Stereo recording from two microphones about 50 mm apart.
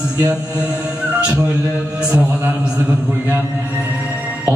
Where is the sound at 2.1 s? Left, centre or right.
Right.